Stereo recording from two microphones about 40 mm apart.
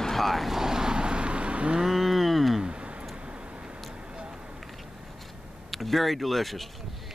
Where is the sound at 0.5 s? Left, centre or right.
Centre; by 1.8 s right.